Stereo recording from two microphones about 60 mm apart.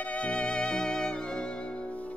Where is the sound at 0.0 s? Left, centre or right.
Left.